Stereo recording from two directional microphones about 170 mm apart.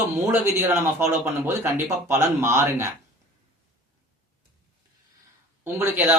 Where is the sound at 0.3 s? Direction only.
15° right (ahead or behind).